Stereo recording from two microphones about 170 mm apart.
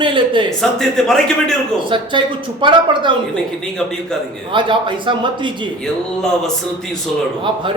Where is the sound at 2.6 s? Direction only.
30° right (ahead or behind).